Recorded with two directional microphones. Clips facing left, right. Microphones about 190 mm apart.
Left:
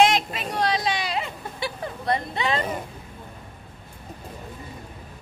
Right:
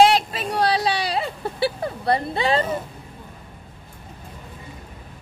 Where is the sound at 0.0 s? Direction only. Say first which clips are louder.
Right 4 dB; 30° right (ahead or behind).